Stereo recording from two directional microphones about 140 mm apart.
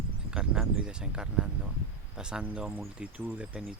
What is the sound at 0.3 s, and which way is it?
Speech, 5° right (ahead or behind).